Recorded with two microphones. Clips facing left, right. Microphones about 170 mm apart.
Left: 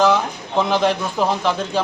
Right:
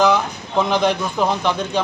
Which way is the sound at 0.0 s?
Centre (ahead or behind).